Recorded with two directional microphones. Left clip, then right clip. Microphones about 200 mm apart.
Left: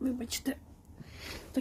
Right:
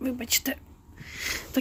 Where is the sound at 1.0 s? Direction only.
10° right (ahead or behind).